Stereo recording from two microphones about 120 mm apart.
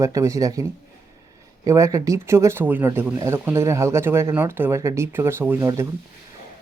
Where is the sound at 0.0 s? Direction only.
25° right (ahead or behind).